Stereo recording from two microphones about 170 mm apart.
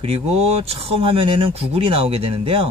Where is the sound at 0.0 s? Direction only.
35° right (ahead or behind).